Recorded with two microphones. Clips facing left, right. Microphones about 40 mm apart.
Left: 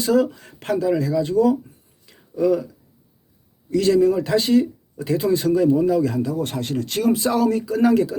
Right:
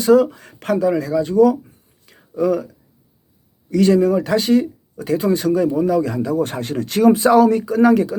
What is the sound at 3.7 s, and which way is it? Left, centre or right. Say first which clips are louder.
Speech: right 2 dB; centre.